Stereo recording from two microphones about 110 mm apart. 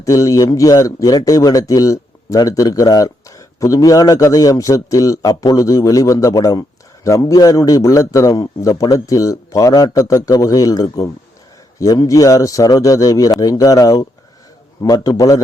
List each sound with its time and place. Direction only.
0.0 s speech: 30° left (ahead or behind)